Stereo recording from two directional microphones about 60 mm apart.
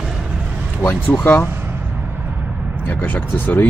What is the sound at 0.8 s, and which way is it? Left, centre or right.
Speech, left.